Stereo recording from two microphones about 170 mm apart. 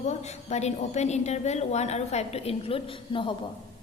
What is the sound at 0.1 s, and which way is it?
A woman's voice, 40° left (ahead or behind).